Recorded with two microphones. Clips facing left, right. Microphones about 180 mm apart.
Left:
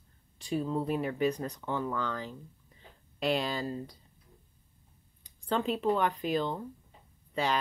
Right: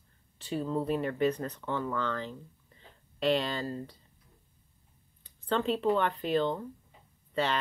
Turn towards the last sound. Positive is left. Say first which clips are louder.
# even
turn(degrees=10)  # may be behind; listen again after turning